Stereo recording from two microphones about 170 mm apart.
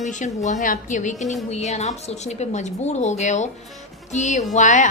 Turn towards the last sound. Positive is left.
turn(degrees=45)  # may be behind; listen again after turning